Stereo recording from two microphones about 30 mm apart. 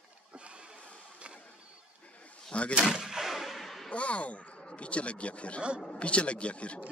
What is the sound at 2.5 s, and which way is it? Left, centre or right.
Speech, left.